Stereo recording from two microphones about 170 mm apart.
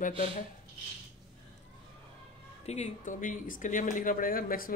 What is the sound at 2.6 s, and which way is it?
Speech, 40° left (ahead or behind).